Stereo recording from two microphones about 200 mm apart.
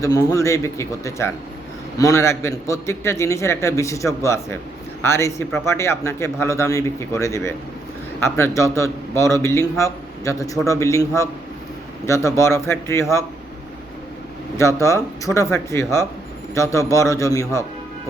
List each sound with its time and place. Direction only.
0.0 s a man's voice: 15° left (ahead or behind)
14.5 s a man's voice: 15° left (ahead or behind)